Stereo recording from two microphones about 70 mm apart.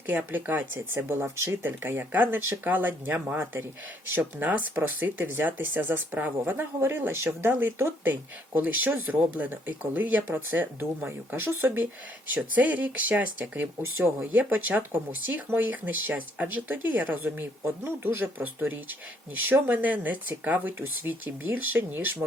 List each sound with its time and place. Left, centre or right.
0.1 s speech: right
12.3 s speech: right